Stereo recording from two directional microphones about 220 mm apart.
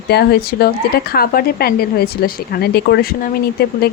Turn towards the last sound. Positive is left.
turn(degrees=45)  # may be behind; listen again after turning